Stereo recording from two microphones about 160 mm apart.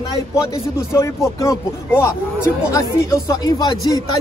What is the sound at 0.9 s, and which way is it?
Speech, 20° left (ahead or behind).